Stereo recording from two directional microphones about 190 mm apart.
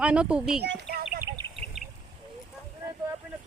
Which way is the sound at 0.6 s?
55° right (ahead or behind).